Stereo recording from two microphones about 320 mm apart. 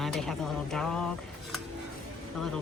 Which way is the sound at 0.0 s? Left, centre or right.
Centre.